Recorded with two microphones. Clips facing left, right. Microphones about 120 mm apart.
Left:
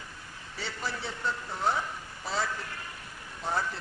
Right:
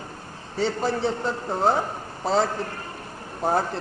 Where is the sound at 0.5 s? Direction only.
45° right (ahead or behind).